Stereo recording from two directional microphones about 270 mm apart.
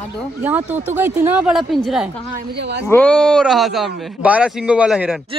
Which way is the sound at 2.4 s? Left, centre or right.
Right.